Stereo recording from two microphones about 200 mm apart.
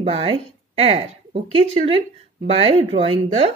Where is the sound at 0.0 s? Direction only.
25° right (ahead or behind).